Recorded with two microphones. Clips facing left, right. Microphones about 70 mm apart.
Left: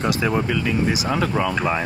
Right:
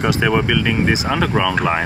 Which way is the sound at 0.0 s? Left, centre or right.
Right.